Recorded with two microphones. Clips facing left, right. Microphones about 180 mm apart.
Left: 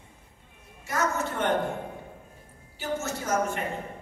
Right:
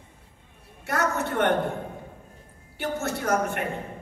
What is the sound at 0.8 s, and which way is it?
Speech, 65° right (ahead or behind).